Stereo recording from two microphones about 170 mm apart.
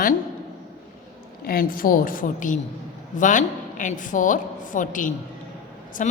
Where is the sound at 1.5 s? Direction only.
60° left (ahead or behind).